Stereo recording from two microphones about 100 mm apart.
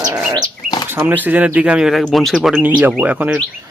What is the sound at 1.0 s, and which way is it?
Speech, 20° right (ahead or behind).